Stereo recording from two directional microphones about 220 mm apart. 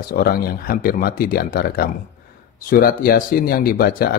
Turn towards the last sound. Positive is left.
turn(degrees=40)  # may be behind; listen again after turning